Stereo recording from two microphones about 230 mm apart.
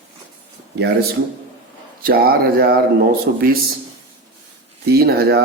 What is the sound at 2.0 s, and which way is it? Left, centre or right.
Speech, right.